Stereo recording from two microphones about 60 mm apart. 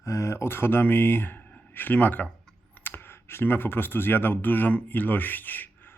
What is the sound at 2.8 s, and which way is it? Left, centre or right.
Speech, left.